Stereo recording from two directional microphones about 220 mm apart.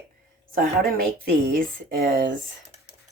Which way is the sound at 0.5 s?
40° right (ahead or behind).